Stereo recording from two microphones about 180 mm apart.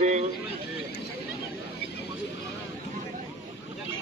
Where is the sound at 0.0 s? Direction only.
40° right (ahead or behind).